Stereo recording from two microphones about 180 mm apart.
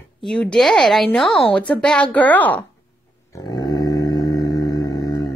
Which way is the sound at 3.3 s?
20° left (ahead or behind).